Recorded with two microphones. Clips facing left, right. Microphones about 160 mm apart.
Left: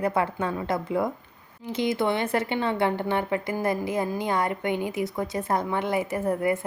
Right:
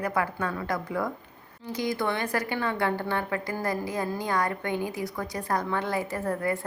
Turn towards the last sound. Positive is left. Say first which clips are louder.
# left 4 dB
turn(degrees=20)  # may be behind; listen again after turning